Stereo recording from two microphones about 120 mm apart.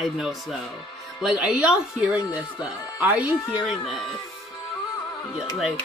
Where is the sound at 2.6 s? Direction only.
10° right (ahead or behind).